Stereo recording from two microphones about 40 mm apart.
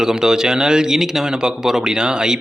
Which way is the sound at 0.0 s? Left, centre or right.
Centre.